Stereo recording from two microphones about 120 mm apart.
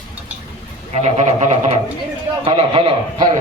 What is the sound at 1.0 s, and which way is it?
Speech, 75° right (ahead or behind).